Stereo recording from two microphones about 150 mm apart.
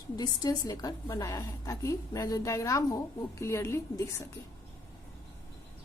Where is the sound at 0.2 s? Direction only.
25° left (ahead or behind).